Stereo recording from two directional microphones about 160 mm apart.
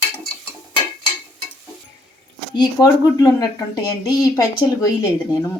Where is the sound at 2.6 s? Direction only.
25° left (ahead or behind).